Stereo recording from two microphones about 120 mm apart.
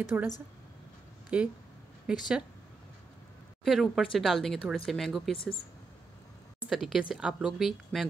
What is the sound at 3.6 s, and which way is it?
Speech, centre (ahead or behind).